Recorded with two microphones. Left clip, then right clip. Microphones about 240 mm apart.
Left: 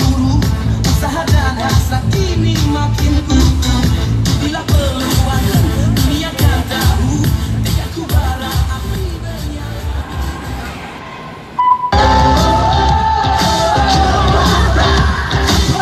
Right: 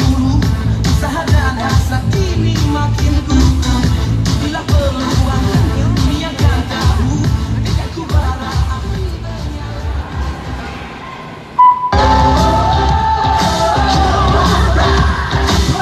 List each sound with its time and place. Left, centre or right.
0.0 s music: left
11.6 s music: left